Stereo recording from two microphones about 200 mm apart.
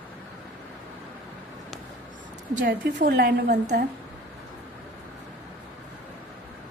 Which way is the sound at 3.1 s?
55° right (ahead or behind).